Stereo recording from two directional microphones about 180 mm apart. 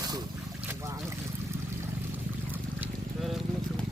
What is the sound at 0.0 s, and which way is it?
Boat, 20° right (ahead or behind).